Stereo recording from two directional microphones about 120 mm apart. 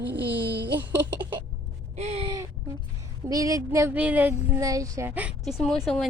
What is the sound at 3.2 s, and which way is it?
Speech, 30° right (ahead or behind).